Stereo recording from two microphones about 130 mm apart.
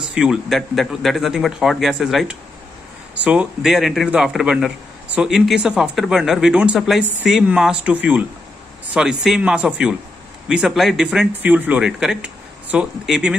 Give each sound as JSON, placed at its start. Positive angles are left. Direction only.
{"t": 0.0, "sound": "a man's voice", "side_deg": -5}